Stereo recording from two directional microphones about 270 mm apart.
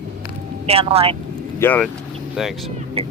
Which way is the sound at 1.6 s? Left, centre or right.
Centre.